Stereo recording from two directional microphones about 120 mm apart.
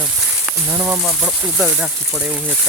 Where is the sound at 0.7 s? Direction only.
20° right (ahead or behind).